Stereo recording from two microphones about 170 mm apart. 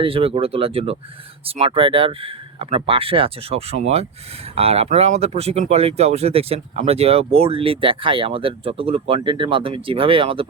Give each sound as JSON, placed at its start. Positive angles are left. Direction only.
{"t": 0.0, "sound": "speech", "side_deg": -35}